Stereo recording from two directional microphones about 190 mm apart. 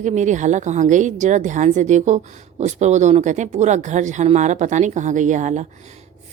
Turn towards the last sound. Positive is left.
turn(degrees=-40)  # may be behind; listen again after turning